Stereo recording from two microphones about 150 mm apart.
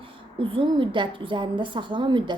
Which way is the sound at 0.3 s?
35° right (ahead or behind).